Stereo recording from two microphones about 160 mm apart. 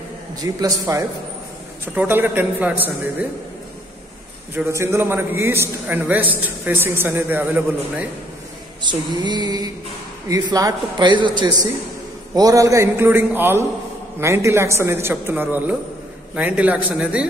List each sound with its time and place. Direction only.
0.4 s a man's voice: 25° right (ahead or behind)
4.6 s a man's voice: 15° right (ahead or behind)
8.8 s a man's voice: 25° right (ahead or behind); by 17.3 s 5° right (ahead or behind)